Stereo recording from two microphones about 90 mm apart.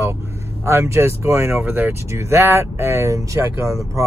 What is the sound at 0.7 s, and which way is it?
Speech, 30° right (ahead or behind).